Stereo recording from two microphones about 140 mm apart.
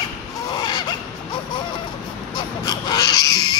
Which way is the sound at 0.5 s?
30° left (ahead or behind).